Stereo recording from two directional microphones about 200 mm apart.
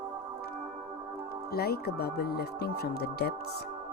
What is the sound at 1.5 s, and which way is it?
Speech, 50° left (ahead or behind).